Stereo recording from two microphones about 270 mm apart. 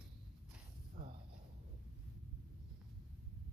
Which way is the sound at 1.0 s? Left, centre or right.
Right.